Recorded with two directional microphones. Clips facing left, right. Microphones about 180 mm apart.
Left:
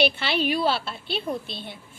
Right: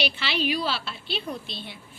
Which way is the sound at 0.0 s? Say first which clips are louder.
Left 4 dB; 55° left (ahead or behind).